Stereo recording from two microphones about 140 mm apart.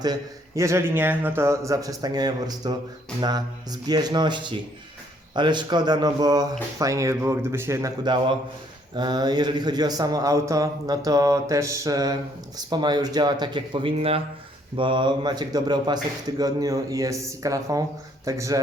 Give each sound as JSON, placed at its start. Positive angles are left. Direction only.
{"t": 0.0, "sound": "speech", "side_deg": -25}